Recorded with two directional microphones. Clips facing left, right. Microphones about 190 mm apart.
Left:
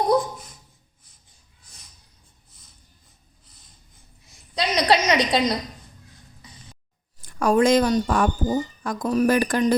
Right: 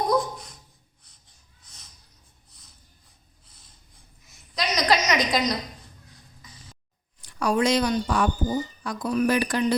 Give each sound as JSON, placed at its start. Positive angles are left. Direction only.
{"t": 3.4, "sound": "snort", "side_deg": 0}
{"t": 4.3, "sound": "a sound", "side_deg": 30}
{"t": 7.3, "sound": "speech", "side_deg": 50}